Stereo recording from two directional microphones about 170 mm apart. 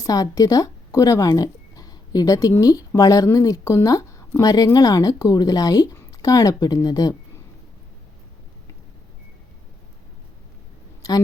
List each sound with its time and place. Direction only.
0.0 s speech: 20° left (ahead or behind)